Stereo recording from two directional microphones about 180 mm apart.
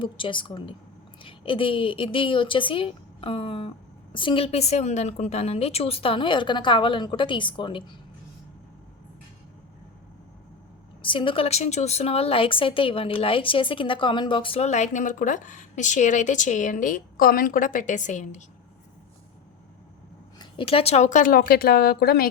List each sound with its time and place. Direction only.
0.0 s a woman's voice: 25° left (ahead or behind)
11.0 s a woman's voice: 30° left (ahead or behind)
20.4 s a woman's voice: 30° left (ahead or behind); by 22.3 s 60° left (ahead or behind)